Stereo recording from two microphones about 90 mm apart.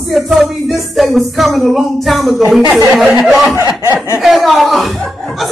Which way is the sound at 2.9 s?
15° right (ahead or behind).